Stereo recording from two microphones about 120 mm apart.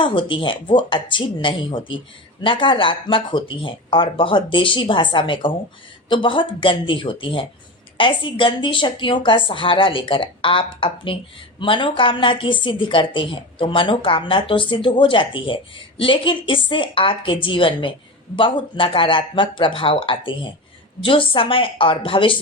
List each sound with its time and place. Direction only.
0.0 s a woman's voice: 45° left (ahead or behind)